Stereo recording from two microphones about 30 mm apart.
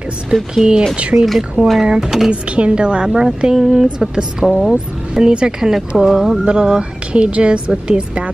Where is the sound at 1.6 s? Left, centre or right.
Right.